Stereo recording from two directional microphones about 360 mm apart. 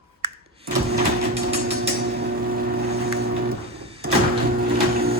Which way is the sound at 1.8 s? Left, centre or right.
Right.